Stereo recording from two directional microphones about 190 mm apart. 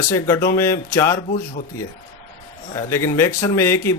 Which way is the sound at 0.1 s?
15° left (ahead or behind).